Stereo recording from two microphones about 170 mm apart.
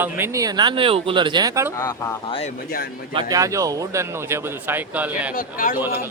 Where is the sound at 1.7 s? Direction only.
20° left (ahead or behind).